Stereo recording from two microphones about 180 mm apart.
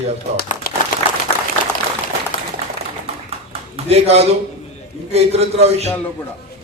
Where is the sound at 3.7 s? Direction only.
35° right (ahead or behind).